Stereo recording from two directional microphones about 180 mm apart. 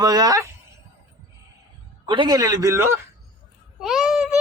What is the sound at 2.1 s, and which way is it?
Speech, 25° right (ahead or behind).